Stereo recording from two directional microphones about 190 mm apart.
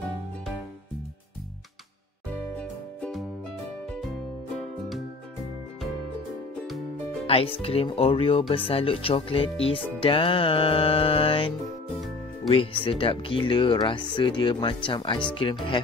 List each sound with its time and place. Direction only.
2.6 s music: 5° left (ahead or behind)
4.6 s music: centre (ahead or behind)
7.2 s speech: 30° left (ahead or behind)